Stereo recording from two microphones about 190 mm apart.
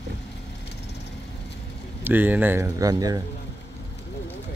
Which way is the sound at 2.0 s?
10° right (ahead or behind).